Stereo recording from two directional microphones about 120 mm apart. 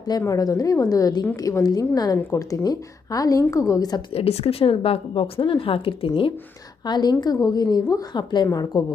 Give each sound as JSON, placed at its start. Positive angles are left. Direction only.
{"t": 0.1, "sound": "a woman's voice", "side_deg": 30}
{"t": 4.1, "sound": "speech", "side_deg": 55}
{"t": 6.8, "sound": "a woman's voice", "side_deg": 35}